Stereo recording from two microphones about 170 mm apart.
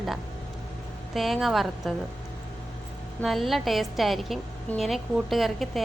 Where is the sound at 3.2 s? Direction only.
Centre (ahead or behind).